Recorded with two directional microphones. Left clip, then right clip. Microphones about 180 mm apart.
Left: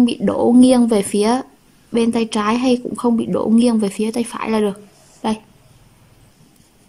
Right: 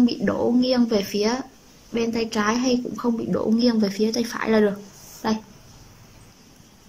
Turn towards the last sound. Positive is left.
turn(degrees=15)  # may be behind; listen again after turning